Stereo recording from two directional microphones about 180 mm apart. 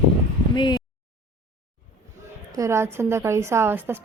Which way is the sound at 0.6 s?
25° left (ahead or behind).